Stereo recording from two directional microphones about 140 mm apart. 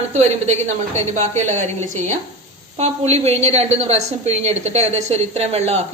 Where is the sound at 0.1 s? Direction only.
50° right (ahead or behind).